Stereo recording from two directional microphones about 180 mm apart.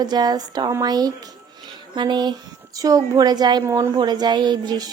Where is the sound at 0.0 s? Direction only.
20° right (ahead or behind).